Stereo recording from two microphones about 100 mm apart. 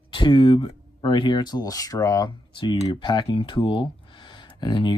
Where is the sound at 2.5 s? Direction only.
50° left (ahead or behind).